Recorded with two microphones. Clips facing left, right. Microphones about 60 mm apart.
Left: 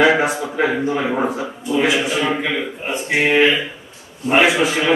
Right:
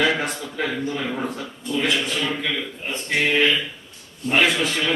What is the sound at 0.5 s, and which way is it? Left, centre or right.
Speech, left.